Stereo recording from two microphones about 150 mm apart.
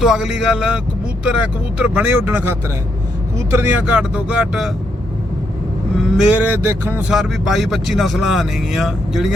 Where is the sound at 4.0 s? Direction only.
5° right (ahead or behind).